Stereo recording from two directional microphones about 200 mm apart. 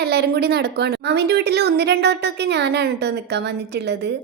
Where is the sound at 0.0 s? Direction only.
55° right (ahead or behind).